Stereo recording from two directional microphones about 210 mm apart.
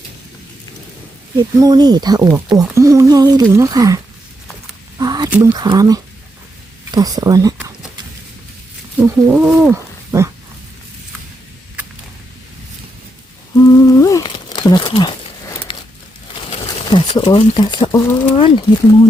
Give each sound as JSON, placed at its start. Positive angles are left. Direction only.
{"t": 1.4, "sound": "speech", "side_deg": -20}
{"t": 4.9, "sound": "a sound", "side_deg": -20}
{"t": 5.3, "sound": "speech", "side_deg": -10}
{"t": 9.0, "sound": "speech", "side_deg": -10}
{"t": 13.7, "sound": "humming", "side_deg": 15}
{"t": 16.5, "sound": "speech", "side_deg": 25}